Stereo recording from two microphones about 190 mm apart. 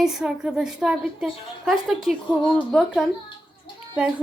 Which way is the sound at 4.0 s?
5° right (ahead or behind).